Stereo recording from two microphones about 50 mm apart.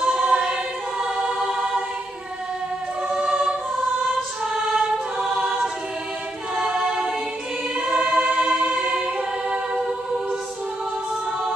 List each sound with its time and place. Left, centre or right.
0.0 s choir: centre
3.1 s choir: centre
4.7 s choir: centre
6.5 s a capella: centre
7.8 s choir: right